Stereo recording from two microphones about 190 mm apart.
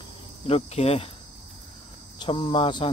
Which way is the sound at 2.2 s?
25° left (ahead or behind).